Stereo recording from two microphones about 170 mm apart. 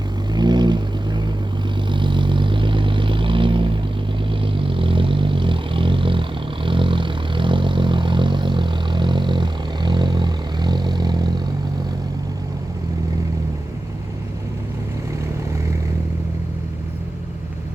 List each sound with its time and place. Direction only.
0.3 s vehicle: 25° right (ahead or behind)